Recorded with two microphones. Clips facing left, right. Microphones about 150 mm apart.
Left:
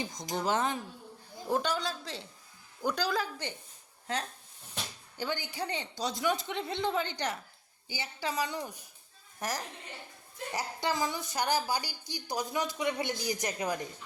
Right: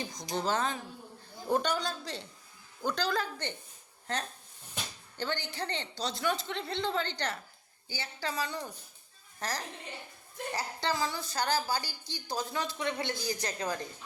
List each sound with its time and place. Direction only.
0.0 s a woman's voice: 20° left (ahead or behind)
1.5 s a woman's voice: centre (ahead or behind); by 13.8 s 15° left (ahead or behind)